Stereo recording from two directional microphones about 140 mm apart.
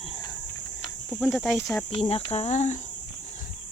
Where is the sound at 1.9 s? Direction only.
45° left (ahead or behind).